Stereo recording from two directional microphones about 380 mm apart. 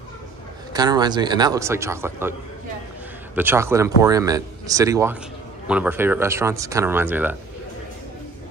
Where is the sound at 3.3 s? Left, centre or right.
Centre.